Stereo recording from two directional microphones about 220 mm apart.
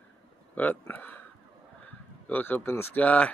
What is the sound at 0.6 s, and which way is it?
Speech, 10° left (ahead or behind).